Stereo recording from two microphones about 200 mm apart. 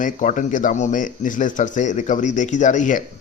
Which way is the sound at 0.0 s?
40° left (ahead or behind).